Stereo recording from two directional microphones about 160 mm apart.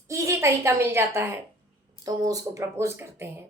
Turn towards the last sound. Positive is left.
turn(degrees=-15)  # may be behind; listen again after turning